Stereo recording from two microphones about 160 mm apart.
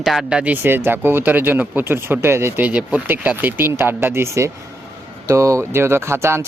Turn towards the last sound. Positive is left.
turn(degrees=-15)  # may be behind; listen again after turning